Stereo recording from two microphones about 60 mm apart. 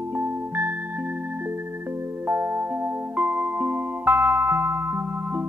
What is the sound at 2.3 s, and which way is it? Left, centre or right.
Music, right.